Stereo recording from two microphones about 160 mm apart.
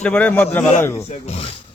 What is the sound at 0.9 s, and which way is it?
Speech, 40° left (ahead or behind).